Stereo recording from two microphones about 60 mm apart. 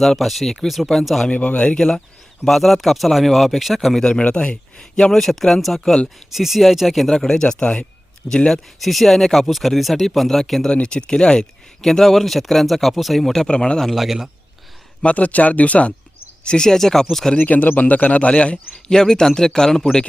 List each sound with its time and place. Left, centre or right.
0.0 s speech: centre
1.3 s speech: left; by 4.0 s centre
4.2 s speech: left
5.1 s a man's voice: centre
8.8 s speech: centre
10.8 s speech: centre
13.5 s a man's voice: centre
13.8 s speech: centre
15.0 s a man's voice: left; by 17.3 s centre
17.3 s a man's voice: left